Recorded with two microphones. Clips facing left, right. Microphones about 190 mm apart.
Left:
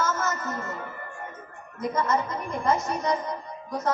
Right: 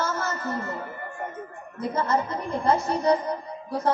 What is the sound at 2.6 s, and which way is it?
Speech, 30° right (ahead or behind).